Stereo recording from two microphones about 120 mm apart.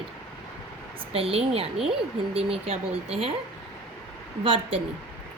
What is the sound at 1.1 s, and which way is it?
A woman's voice, 55° right (ahead or behind).